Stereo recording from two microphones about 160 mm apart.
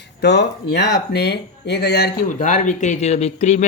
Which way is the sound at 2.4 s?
50° left (ahead or behind).